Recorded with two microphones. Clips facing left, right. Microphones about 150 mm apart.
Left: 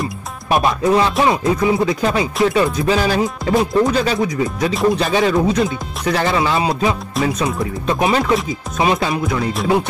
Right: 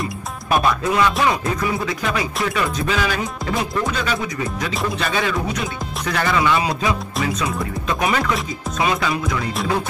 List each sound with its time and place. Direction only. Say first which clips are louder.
0.5 s music: left 4 dB; 30° left (ahead or behind)
1.2 s speech: left 5 dB; 25° left (ahead or behind)
2.4 s music: left 9 dB; 30° left (ahead or behind)
7.3 s speech: left 3 dB; 30° left (ahead or behind)